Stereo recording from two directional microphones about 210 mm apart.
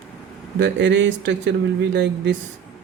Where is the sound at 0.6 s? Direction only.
55° right (ahead or behind).